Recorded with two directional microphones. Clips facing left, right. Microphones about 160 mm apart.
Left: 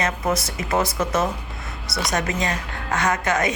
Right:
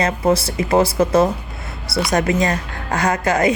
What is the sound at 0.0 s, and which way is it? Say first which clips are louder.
A woman's voice: right 6 dB; 30° right (ahead or behind).